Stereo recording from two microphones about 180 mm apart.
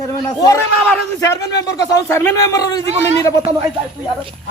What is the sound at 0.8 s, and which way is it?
A man's voice, 10° left (ahead or behind).